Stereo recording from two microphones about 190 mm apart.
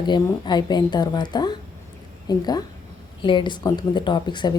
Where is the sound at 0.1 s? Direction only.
25° left (ahead or behind).